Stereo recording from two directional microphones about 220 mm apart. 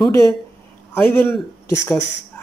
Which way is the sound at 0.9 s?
10° left (ahead or behind).